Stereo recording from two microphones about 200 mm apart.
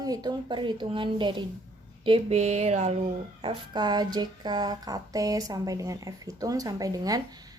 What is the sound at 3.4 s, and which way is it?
Speech, 25° right (ahead or behind).